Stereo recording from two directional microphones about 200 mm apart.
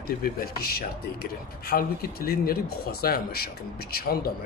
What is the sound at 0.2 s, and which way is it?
Speech, 50° left (ahead or behind).